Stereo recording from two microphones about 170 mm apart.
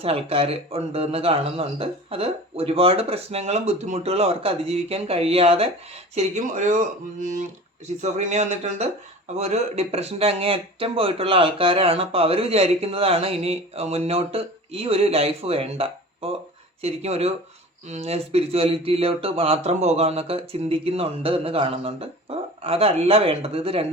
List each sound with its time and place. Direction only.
0.0 s speech: 35° right (ahead or behind)